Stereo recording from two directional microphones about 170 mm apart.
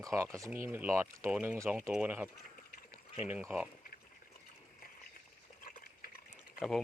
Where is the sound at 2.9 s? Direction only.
10° right (ahead or behind).